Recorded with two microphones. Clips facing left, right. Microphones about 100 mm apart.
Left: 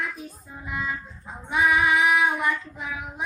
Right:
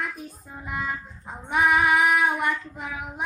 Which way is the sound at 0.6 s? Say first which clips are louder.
Even; 50° right (ahead or behind).